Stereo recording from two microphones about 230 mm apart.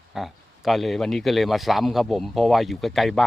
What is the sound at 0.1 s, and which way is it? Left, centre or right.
Speech, centre.